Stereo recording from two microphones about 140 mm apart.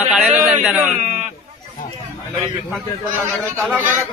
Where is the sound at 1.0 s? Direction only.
55° right (ahead or behind).